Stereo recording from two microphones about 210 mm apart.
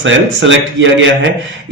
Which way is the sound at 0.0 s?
65° right (ahead or behind).